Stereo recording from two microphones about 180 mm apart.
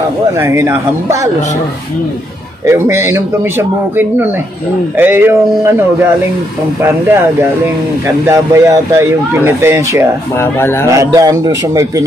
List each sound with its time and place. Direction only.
0.4 s a man's voice: 15° right (ahead or behind)
2.6 s a man's voice: 15° right (ahead or behind)
8.3 s a man's voice: 15° right (ahead or behind)
10.4 s a man's voice: 15° left (ahead or behind)
10.9 s a man's voice: 20° right (ahead or behind)